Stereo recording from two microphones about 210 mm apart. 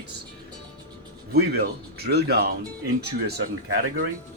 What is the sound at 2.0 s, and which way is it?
Speech, 50° right (ahead or behind).